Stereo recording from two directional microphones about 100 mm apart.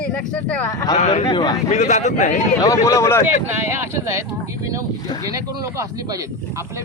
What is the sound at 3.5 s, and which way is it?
Speech, 25° right (ahead or behind).